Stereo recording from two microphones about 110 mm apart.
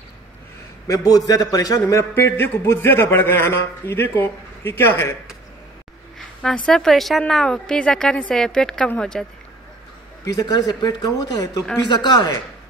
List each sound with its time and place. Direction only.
0.8 s a man's voice: 35° left (ahead or behind)
6.1 s a woman's voice: 10° left (ahead or behind)
10.2 s speech: 35° left (ahead or behind)